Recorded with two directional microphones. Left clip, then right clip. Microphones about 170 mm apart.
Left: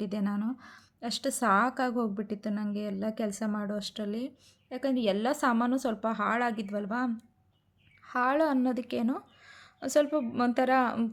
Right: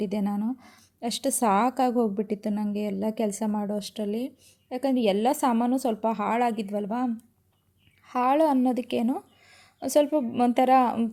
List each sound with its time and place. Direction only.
0.0 s a woman's voice: 15° right (ahead or behind)